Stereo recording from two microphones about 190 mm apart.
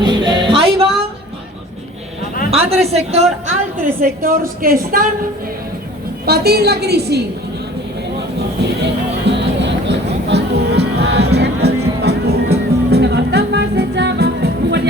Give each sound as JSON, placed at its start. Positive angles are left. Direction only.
{"t": 0.0, "sound": "music", "side_deg": -25}
{"t": 2.5, "sound": "a woman's voice", "side_deg": -35}
{"t": 4.2, "sound": "speech", "side_deg": -50}
{"t": 6.2, "sound": "a woman's voice", "side_deg": -55}
{"t": 8.4, "sound": "music", "side_deg": -65}